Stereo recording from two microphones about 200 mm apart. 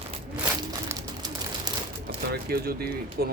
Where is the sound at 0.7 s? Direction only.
20° right (ahead or behind).